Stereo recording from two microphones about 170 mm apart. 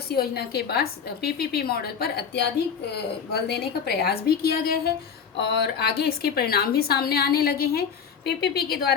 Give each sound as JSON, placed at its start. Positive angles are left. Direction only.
{"t": 0.1, "sound": "a woman's voice", "side_deg": 65}
{"t": 5.4, "sound": "a woman's voice", "side_deg": 80}